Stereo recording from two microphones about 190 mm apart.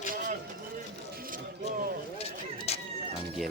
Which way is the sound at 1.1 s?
50° right (ahead or behind).